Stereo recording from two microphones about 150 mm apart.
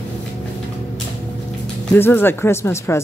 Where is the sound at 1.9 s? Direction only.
15° left (ahead or behind).